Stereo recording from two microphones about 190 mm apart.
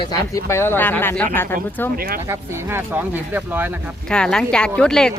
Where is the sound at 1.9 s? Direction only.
50° right (ahead or behind).